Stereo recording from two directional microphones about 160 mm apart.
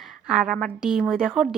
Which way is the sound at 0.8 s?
5° right (ahead or behind).